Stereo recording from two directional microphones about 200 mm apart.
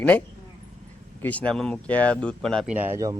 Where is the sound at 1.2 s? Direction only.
5° left (ahead or behind).